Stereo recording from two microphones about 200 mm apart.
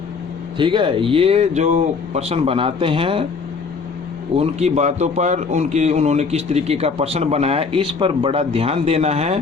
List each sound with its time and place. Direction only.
0.6 s speech: 25° right (ahead or behind)
4.4 s a man's voice: 35° right (ahead or behind)